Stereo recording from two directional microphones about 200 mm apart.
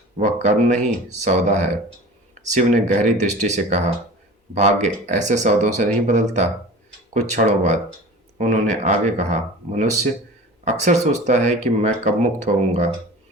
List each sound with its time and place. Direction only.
0.2 s speech: 35° right (ahead or behind)